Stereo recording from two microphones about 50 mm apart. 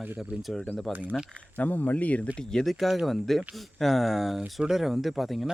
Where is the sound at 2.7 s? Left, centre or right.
Centre.